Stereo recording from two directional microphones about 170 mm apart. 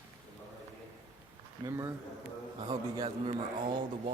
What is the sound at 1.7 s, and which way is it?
Speech, 20° right (ahead or behind).